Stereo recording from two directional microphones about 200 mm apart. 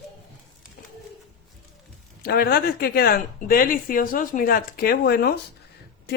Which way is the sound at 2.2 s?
50° left (ahead or behind).